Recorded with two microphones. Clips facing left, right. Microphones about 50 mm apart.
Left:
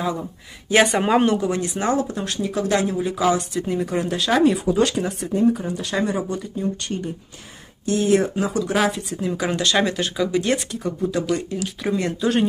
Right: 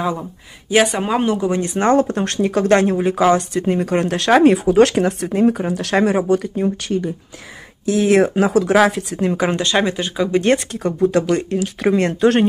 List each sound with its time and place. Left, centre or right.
0.0 s speech: centre
0.7 s speech: centre
1.6 s speech: right
4.3 s speech: right
4.6 s speech: right
8.0 s speech: right
9.3 s speech: right
10.3 s speech: right